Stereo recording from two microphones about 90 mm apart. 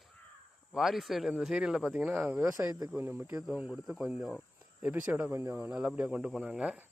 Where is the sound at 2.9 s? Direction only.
25° right (ahead or behind).